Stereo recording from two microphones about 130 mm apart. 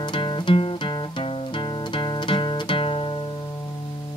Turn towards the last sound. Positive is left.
turn(degrees=40)  # may be behind; listen again after turning